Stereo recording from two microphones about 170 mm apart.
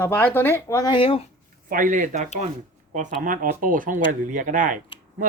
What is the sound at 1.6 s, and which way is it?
Speech, 55° right (ahead or behind).